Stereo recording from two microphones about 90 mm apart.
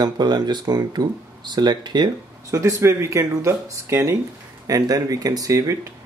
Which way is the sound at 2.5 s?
35° right (ahead or behind).